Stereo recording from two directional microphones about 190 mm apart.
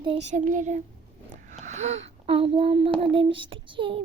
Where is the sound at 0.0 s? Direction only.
30° right (ahead or behind).